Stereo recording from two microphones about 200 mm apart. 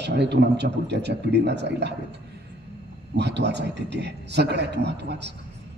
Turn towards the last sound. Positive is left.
turn(degrees=-60)  # may be behind; listen again after turning